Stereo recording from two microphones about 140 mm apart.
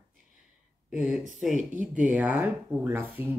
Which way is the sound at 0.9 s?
5° right (ahead or behind).